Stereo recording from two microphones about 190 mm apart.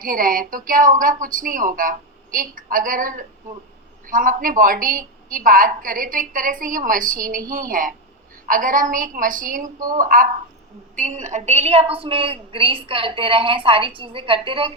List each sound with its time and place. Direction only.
0.0 s a woman's voice: 45° right (ahead or behind); by 14.7 s 30° right (ahead or behind)